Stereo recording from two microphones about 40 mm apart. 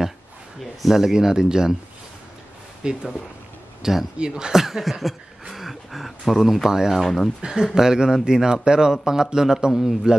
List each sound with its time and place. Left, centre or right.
0.6 s a man's voice: centre
2.8 s a man's voice: centre
6.9 s speech: centre
7.4 s a man's voice: centre